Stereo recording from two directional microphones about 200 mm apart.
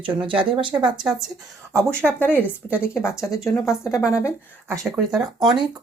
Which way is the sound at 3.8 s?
15° left (ahead or behind).